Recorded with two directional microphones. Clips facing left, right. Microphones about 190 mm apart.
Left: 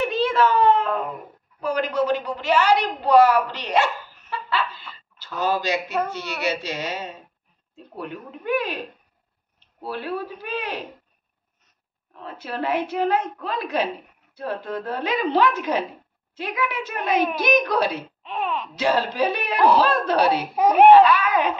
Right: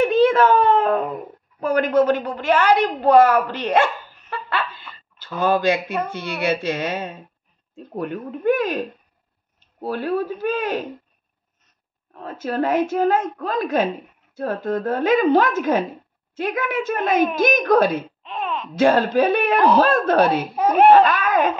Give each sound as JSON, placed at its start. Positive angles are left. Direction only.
{"t": 0.0, "sound": "a sound", "side_deg": -50}
{"t": 1.6, "sound": "a woman's voice", "side_deg": -50}
{"t": 12.1, "sound": "a woman's voice", "side_deg": -45}
{"t": 18.2, "sound": "a sound", "side_deg": 10}
{"t": 18.8, "sound": "a woman's voice", "side_deg": -50}
{"t": 20.5, "sound": "a child's voice", "side_deg": 10}
{"t": 20.9, "sound": "a woman's voice", "side_deg": -50}